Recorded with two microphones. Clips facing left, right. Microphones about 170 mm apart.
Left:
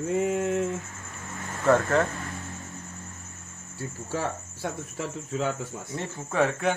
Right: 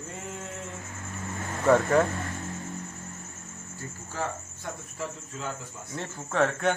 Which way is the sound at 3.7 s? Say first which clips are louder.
Left 7 dB; 75° left (ahead or behind).